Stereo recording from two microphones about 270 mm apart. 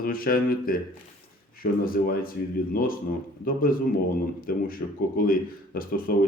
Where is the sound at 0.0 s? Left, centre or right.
Left.